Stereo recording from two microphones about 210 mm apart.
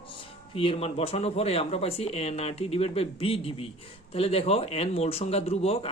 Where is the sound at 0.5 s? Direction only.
25° left (ahead or behind).